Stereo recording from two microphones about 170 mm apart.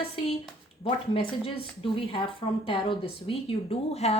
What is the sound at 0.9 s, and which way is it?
A woman's voice, 30° left (ahead or behind).